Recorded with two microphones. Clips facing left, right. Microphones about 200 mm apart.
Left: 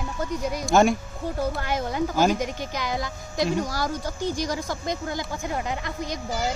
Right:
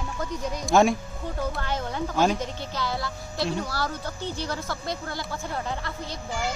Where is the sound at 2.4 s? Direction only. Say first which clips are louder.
Left 2 dB; 15° left (ahead or behind).